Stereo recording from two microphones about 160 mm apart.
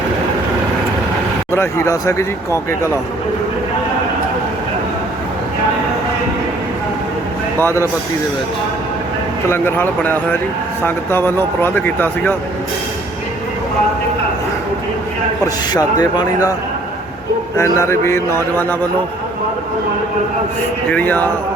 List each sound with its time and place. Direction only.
1.5 s speech: 15° left (ahead or behind)
7.6 s speech: 15° left (ahead or behind)
9.5 s speech: 15° left (ahead or behind)
15.7 s speech: 25° left (ahead or behind)
17.6 s speech: 15° left (ahead or behind)
20.9 s speech: 10° left (ahead or behind)